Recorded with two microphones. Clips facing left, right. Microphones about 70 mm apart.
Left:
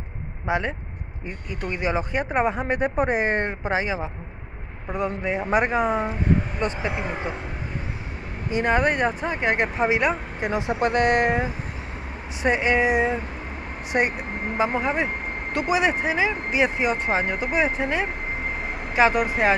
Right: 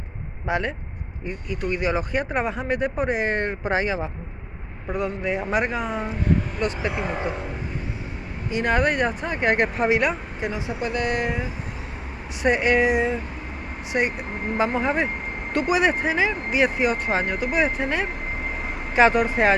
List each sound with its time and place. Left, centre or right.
0.5 s speech: centre
3.6 s speech: centre
4.9 s speech: left
7.1 s speech: centre
8.5 s speech: left
10.4 s speech: left
12.4 s speech: left
13.9 s speech: left
14.6 s speech: centre
16.6 s speech: left
17.1 s speech: centre
17.4 s speech: left
18.9 s speech: centre